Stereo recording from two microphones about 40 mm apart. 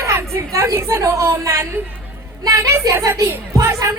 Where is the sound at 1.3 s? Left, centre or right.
Right.